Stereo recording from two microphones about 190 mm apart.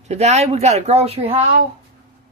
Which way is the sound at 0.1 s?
35° right (ahead or behind).